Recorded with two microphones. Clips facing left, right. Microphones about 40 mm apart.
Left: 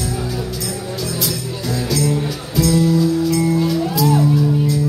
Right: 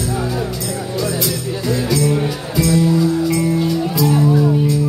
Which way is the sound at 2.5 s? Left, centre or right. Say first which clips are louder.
Even; centre.